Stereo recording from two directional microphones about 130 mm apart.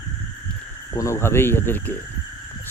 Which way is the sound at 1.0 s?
20° left (ahead or behind).